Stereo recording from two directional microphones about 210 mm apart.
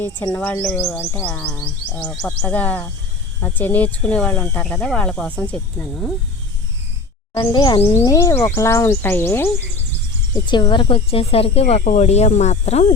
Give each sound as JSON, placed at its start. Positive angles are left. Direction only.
{"t": 0.0, "sound": "speech", "side_deg": 10}
{"t": 7.3, "sound": "speech", "side_deg": 20}